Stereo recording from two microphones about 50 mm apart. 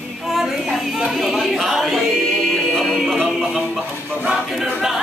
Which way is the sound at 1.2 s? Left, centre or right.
Centre.